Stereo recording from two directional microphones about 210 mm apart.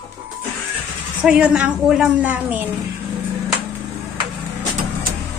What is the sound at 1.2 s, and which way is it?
A woman's voice, 5° right (ahead or behind).